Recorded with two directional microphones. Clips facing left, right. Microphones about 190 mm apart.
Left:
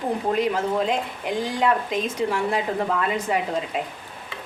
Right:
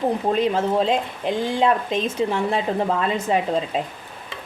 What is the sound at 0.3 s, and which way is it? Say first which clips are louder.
Speech: right 3 dB; 25° right (ahead or behind).